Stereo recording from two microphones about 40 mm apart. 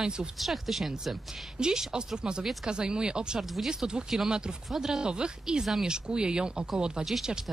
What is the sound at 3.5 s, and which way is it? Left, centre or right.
Speech, centre.